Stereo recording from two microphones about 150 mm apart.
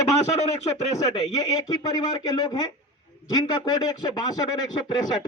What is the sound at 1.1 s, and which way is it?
A man's voice, 25° left (ahead or behind).